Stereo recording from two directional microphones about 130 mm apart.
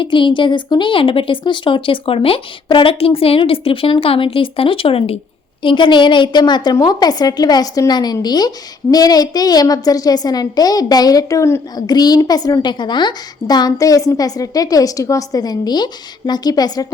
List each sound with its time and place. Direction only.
0.0 s a woman's voice: 40° left (ahead or behind)
5.6 s a woman's voice: 40° left (ahead or behind)